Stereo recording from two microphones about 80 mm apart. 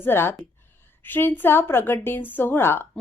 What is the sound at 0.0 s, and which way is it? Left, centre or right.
A woman's voice, left.